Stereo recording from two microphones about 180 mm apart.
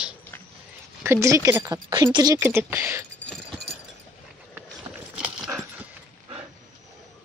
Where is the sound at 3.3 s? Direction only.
Centre (ahead or behind).